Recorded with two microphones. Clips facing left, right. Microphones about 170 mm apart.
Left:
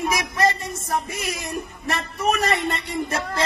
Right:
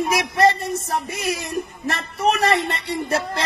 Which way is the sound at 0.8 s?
30° right (ahead or behind).